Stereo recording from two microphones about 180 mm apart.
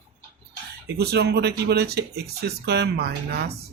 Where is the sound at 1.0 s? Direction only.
60° right (ahead or behind).